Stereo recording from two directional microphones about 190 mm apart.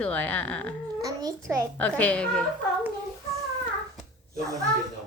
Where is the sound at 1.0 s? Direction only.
20° right (ahead or behind).